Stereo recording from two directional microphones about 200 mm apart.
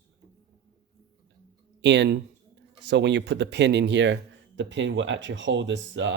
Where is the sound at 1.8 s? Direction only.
60° right (ahead or behind).